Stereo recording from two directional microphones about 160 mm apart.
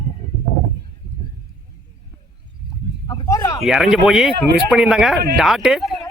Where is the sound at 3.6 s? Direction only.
Centre (ahead or behind).